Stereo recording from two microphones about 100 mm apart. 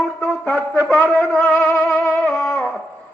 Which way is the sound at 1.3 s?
5° left (ahead or behind).